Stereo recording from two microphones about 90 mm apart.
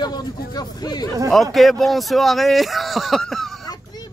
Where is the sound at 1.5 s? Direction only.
Centre (ahead or behind).